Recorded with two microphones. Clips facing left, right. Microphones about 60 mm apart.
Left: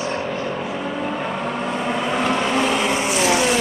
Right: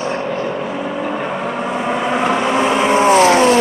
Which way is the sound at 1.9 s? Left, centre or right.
Centre.